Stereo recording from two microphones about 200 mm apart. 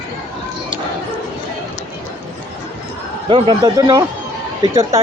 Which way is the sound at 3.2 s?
20° right (ahead or behind).